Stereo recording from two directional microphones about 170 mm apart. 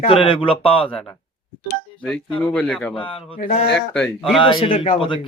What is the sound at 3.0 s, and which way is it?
Speech, 30° left (ahead or behind).